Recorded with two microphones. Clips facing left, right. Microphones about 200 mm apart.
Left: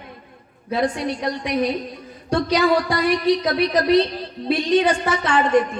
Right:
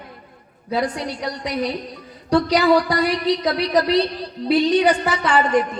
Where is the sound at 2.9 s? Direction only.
25° left (ahead or behind).